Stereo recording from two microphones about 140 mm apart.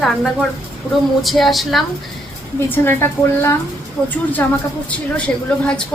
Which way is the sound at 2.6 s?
15° left (ahead or behind).